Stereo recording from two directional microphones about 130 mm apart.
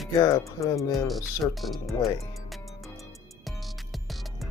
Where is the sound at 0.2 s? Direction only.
25° left (ahead or behind).